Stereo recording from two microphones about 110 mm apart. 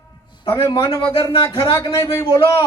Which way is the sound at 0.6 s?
50° left (ahead or behind).